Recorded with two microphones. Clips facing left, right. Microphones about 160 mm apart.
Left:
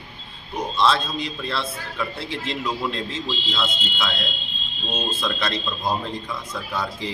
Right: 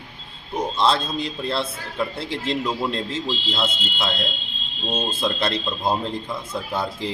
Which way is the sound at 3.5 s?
25° right (ahead or behind).